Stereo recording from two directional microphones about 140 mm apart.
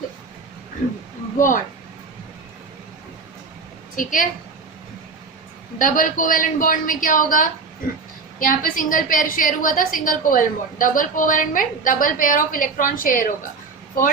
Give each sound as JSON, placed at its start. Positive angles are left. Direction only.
{"t": 1.4, "sound": "a woman's voice", "side_deg": 70}
{"t": 3.9, "sound": "a woman's voice", "side_deg": 70}
{"t": 5.8, "sound": "a woman's voice", "side_deg": 70}